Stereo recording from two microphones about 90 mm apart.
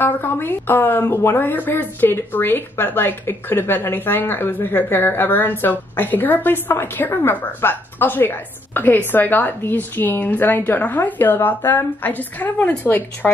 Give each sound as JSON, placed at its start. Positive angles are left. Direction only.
{"t": 0.0, "sound": "a woman's voice", "side_deg": 25}